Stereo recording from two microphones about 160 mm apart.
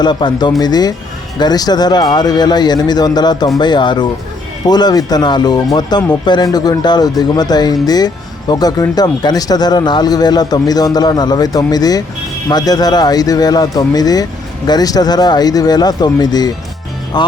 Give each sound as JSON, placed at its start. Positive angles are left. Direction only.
{"t": 0.0, "sound": "speech", "side_deg": 30}